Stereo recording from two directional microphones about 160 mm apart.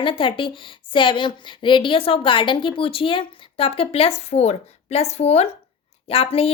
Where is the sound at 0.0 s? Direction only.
30° left (ahead or behind).